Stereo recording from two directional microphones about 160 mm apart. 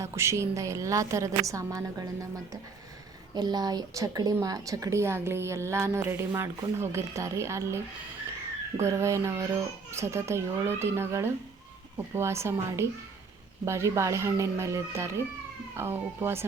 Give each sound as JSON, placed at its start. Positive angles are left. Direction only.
{"t": 0.0, "sound": "a woman's voice", "side_deg": -15}
{"t": 3.3, "sound": "a woman's voice", "side_deg": -25}
{"t": 8.8, "sound": "a woman's voice", "side_deg": -15}